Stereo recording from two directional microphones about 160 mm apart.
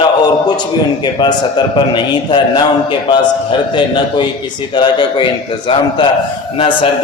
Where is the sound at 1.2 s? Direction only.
30° left (ahead or behind).